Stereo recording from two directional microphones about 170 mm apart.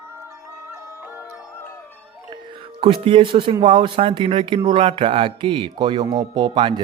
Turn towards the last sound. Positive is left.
turn(degrees=-30)  # may be behind; listen again after turning